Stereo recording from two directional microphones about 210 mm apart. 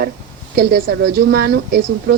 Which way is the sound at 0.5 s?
50° right (ahead or behind).